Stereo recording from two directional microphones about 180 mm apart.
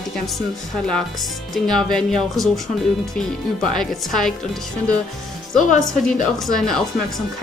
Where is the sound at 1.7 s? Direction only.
Centre (ahead or behind).